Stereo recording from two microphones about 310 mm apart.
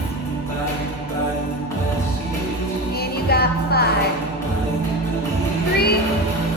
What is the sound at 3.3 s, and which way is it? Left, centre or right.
Music, left.